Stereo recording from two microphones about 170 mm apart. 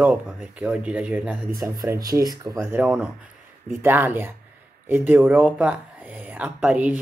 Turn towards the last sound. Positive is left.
turn(degrees=-5)  # may be behind; listen again after turning